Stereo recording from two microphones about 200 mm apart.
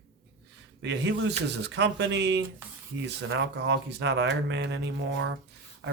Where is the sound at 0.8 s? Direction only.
65° right (ahead or behind).